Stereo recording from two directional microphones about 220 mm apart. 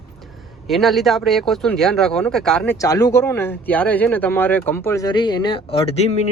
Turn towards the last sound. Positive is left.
turn(degrees=30)  # may be behind; listen again after turning